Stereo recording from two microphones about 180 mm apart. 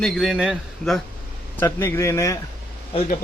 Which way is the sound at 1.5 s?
15° left (ahead or behind).